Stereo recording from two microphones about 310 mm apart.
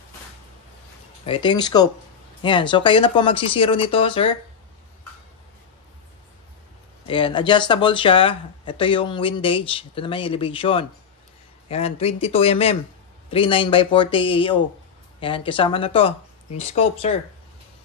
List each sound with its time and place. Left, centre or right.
1.2 s speech: centre
7.1 s speech: centre